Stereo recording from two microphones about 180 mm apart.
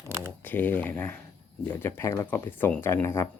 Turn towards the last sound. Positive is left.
turn(degrees=15)  # may be behind; listen again after turning